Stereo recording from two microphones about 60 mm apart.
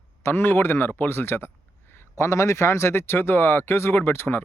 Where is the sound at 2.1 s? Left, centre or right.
Left.